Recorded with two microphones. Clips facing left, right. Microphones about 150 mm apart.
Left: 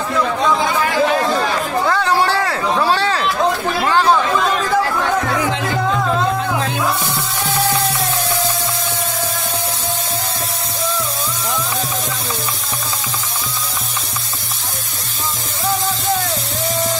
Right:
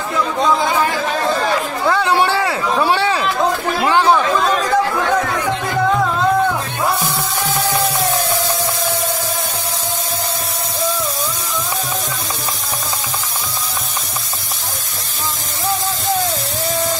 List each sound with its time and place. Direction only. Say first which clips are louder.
1.9 s a sound: right 3 dB; 15° right (ahead or behind)
3.8 s chatter: right 1 dB; 15° right (ahead or behind)
8.0 s music: right 2 dB; 25° right (ahead or behind)